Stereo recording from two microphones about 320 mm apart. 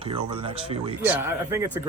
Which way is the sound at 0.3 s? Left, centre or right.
Centre.